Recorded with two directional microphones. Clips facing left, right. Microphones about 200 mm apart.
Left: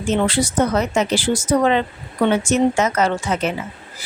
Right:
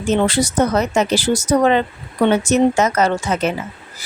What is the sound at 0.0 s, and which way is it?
A woman's voice, 40° right (ahead or behind).